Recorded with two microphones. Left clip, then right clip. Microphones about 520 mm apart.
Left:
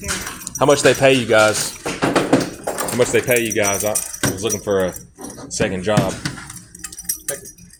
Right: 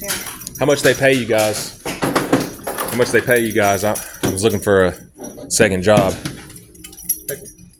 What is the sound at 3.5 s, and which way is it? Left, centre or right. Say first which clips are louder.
Speech: right 3 dB; right.